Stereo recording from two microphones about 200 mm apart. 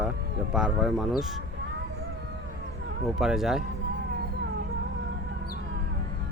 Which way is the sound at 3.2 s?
Centre (ahead or behind).